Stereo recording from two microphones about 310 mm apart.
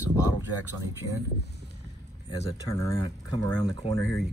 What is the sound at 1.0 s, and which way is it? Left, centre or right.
Speech, left.